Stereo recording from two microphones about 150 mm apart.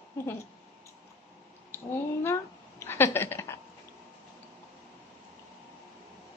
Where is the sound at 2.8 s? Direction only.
15° left (ahead or behind).